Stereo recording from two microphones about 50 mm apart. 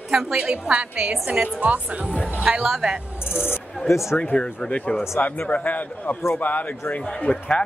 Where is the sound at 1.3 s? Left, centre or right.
Right.